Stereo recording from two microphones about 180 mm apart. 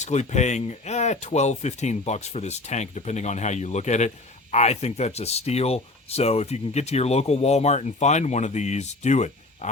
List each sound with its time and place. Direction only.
0.0 s speech: 40° left (ahead or behind)